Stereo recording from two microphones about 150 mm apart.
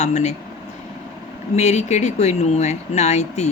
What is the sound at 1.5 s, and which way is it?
Speech, 50° left (ahead or behind).